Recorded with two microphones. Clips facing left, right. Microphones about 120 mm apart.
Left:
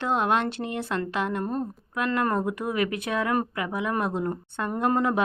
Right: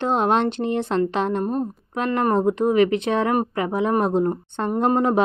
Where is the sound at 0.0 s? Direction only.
25° right (ahead or behind).